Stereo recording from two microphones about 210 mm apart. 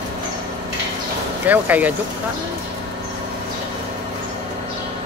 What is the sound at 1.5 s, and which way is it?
Speech, 10° right (ahead or behind).